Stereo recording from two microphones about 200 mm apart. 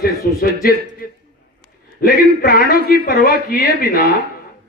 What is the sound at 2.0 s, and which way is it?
A man's voice, 50° left (ahead or behind).